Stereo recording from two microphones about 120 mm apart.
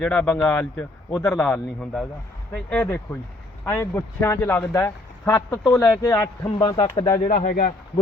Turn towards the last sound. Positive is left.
turn(degrees=75)  # may be behind; listen again after turning